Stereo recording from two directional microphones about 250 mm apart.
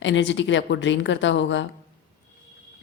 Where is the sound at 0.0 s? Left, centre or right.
Left.